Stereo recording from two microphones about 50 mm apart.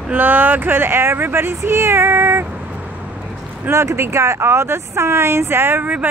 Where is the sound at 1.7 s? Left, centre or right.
Right.